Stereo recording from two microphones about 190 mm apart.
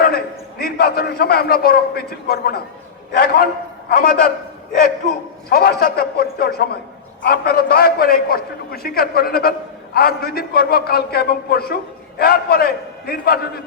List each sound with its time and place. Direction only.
0.6 s a man's voice: 55° left (ahead or behind)
5.5 s a man's voice: 50° left (ahead or behind)